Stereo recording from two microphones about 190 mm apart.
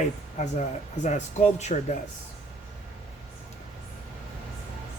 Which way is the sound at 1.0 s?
35° left (ahead or behind).